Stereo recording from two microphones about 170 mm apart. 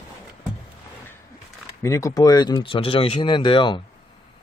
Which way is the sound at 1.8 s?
20° left (ahead or behind).